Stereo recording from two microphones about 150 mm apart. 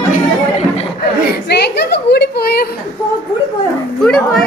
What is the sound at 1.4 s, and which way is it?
A woman's voice, 90° left.